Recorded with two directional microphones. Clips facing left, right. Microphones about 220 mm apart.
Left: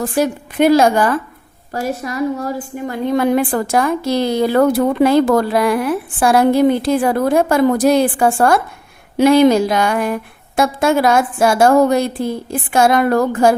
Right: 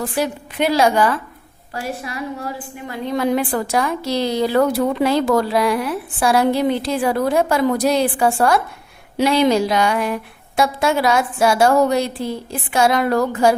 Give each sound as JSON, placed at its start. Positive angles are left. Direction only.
{"t": 0.0, "sound": "a woman's voice", "side_deg": 45}